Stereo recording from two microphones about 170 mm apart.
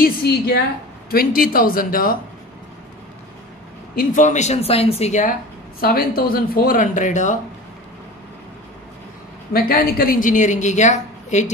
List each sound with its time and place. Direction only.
0.0 s a woman's voice: 70° left (ahead or behind)
3.9 s a woman's voice: 55° left (ahead or behind)
5.8 s speech: 60° left (ahead or behind)
9.5 s a woman's voice: 60° left (ahead or behind); by 11.5 s 45° left (ahead or behind)